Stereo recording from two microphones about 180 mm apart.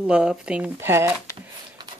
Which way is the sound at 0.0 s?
5° right (ahead or behind).